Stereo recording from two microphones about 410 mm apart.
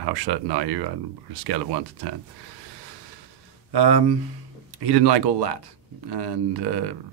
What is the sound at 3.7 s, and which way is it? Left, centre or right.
Speech, right.